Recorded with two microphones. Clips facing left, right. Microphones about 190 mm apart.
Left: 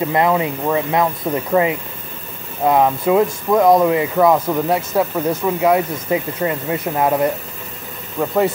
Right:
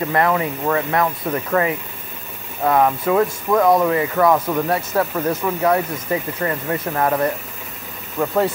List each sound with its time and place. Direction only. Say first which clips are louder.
0.0 s speech: left 2 dB; 15° left (ahead or behind)
8.2 s speech: left 1 dB; 5° left (ahead or behind)